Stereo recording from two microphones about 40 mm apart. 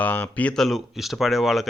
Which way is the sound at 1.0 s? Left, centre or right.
Centre.